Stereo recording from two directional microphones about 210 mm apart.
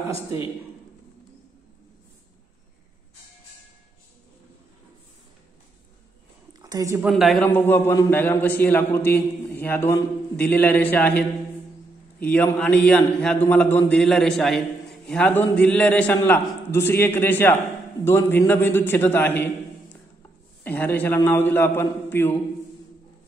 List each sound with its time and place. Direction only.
6.6 s a woman's voice: 15° right (ahead or behind)
7.0 s a woman's voice: centre (ahead or behind)
7.4 s a man's voice: 10° left (ahead or behind)
20.6 s a man's voice: 10° left (ahead or behind)